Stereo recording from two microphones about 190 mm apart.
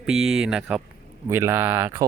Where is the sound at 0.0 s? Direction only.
Centre (ahead or behind).